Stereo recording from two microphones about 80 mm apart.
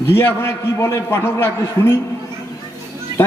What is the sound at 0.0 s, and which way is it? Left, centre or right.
A man's voice, left.